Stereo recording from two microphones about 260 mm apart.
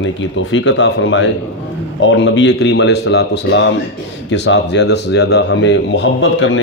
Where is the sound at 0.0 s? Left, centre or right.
Left.